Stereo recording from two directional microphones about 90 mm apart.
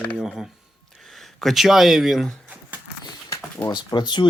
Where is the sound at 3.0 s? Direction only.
50° left (ahead or behind).